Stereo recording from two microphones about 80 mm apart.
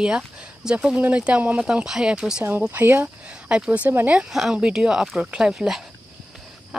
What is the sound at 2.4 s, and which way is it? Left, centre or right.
Speech, right.